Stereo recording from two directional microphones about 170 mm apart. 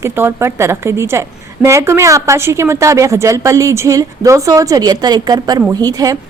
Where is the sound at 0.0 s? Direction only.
15° right (ahead or behind).